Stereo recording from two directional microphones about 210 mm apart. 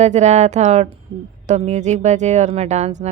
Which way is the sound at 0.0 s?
35° right (ahead or behind).